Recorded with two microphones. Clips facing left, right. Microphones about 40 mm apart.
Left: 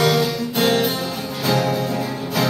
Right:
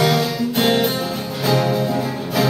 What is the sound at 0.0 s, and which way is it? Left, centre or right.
Guitar, centre.